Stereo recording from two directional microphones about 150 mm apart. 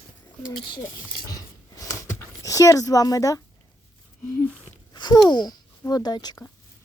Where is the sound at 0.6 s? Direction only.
30° left (ahead or behind).